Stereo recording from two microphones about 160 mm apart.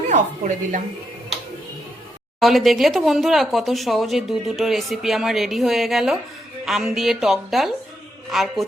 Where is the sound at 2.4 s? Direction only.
Centre (ahead or behind).